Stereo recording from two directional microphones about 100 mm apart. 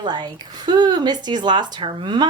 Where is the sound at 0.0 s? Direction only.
45° right (ahead or behind).